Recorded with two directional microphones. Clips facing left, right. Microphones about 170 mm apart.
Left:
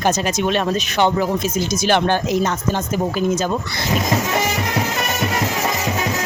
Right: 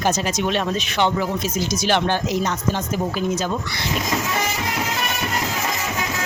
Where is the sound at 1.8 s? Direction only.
50° left (ahead or behind).